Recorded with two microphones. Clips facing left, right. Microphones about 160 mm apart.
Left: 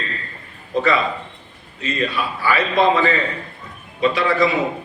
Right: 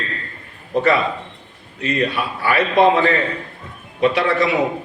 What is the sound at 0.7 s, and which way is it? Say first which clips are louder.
A man's voice: right 2 dB; 60° right (ahead or behind).